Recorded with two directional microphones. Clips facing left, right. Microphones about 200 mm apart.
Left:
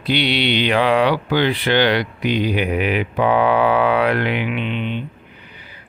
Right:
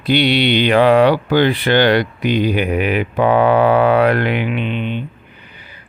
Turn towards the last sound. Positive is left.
turn(degrees=-45)  # may be behind; listen again after turning